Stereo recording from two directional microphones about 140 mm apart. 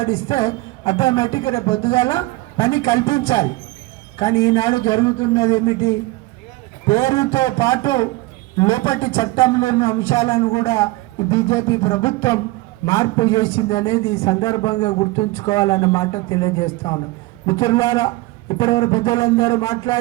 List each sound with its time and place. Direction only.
0.0 s a man's voice: 20° left (ahead or behind)